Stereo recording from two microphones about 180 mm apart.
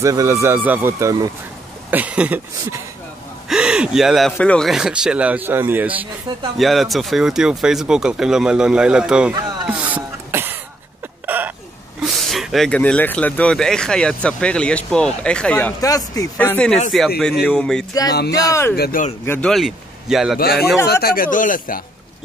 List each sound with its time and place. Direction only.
0.0 s speech: 15° right (ahead or behind)
9.7 s a sound: 10° right (ahead or behind)
11.2 s hiccup: 10° right (ahead or behind)
12.0 s speech: centre (ahead or behind)
15.8 s a man's voice: 20° left (ahead or behind)
16.3 s speech: 10° left (ahead or behind)
18.5 s speech: 15° left (ahead or behind)
18.8 s speech: 55° left (ahead or behind)
19.2 s speech: 10° left (ahead or behind)
19.5 s speech: centre (ahead or behind)
20.3 s a man's voice: 60° left (ahead or behind)